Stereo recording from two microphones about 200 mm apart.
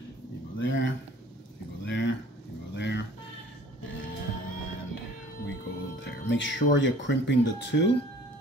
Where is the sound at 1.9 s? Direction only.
65° left (ahead or behind).